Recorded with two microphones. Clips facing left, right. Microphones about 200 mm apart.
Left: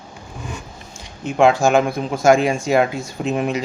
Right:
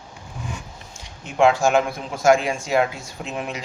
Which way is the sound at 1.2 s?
50° left (ahead or behind).